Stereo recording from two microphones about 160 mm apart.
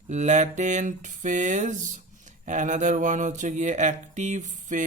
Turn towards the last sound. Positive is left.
turn(degrees=-50)  # may be behind; listen again after turning